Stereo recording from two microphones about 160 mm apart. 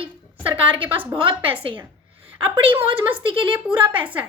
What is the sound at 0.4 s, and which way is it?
A woman's voice, 35° right (ahead or behind).